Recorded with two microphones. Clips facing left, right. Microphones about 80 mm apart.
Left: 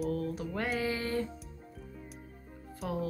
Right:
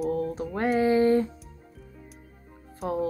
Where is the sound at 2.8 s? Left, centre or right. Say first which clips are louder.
Right 7 dB; right.